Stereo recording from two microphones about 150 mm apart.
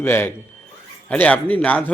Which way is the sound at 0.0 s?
15° left (ahead or behind).